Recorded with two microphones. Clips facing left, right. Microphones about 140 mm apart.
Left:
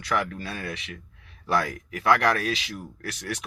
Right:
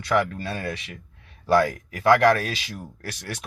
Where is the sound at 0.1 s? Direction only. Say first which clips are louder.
Right 5 dB; 35° right (ahead or behind).